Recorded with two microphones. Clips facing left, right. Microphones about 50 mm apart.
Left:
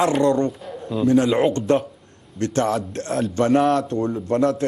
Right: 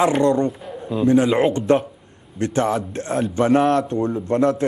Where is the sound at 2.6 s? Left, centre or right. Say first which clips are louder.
Right 1 dB; centre.